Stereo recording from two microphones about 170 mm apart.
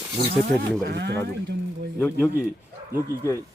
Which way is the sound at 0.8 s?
80° right.